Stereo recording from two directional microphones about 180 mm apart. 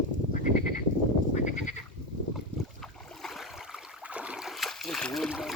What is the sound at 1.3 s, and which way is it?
Goat, 40° left (ahead or behind).